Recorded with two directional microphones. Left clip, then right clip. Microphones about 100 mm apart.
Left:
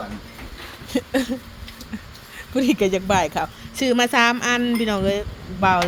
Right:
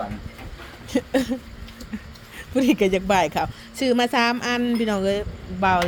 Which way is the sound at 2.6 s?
35° right (ahead or behind).